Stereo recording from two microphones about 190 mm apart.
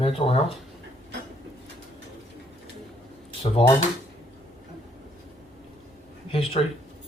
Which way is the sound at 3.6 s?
25° left (ahead or behind).